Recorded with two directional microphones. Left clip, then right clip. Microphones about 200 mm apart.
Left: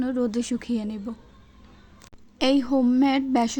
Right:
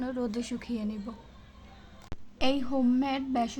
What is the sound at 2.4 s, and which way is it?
A woman's voice, 35° left (ahead or behind).